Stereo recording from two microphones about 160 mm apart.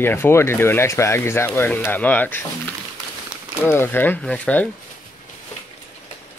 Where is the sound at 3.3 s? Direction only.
5° right (ahead or behind).